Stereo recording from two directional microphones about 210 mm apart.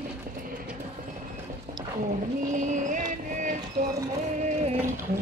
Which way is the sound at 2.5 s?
35° right (ahead or behind).